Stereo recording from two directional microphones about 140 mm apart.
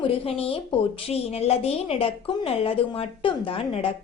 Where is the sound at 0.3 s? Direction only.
45° left (ahead or behind).